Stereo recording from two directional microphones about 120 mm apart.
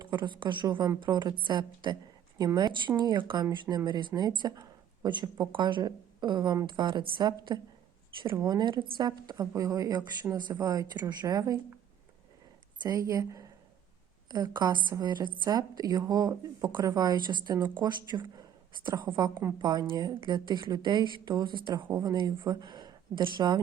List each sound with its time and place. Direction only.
0.0 s a woman's voice: 40° right (ahead or behind)
12.8 s speech: 30° right (ahead or behind)
14.3 s a woman's voice: 35° right (ahead or behind)